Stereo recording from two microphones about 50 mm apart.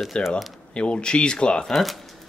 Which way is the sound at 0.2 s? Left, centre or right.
Left.